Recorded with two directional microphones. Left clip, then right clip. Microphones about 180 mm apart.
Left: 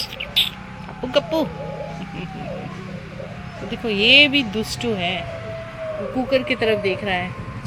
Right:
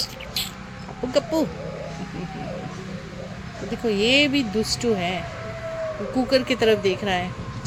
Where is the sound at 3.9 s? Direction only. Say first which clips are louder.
Left 6 dB; 15° right (ahead or behind).